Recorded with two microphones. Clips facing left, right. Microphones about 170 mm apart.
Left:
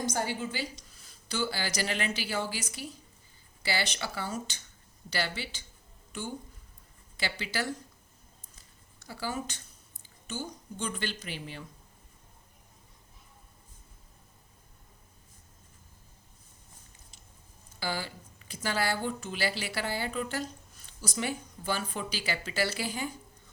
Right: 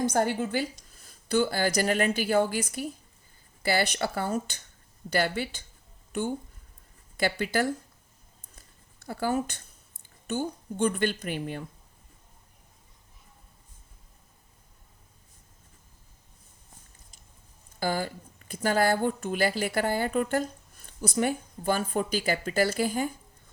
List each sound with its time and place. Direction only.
0.0 s a woman's voice: 55° right (ahead or behind)
7.2 s a woman's voice: 50° right (ahead or behind)
8.5 s a sound: 55° right (ahead or behind)
10.0 s speech: 55° right (ahead or behind)
17.7 s a woman's voice: 50° right (ahead or behind)